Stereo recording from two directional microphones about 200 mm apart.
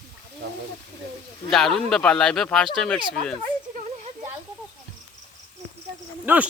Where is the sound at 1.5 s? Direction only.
Centre (ahead or behind).